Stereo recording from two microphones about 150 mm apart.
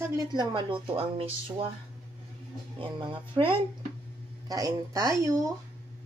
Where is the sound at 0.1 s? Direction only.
30° right (ahead or behind).